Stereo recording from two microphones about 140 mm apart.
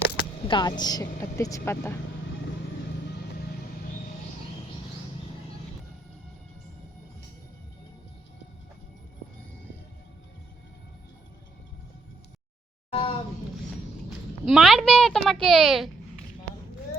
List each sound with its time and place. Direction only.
0.4 s speech: 30° left (ahead or behind)
12.9 s a sound: 40° left (ahead or behind)
14.4 s a child's voice: centre (ahead or behind)